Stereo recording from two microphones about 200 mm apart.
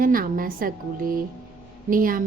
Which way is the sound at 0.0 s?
45° right (ahead or behind).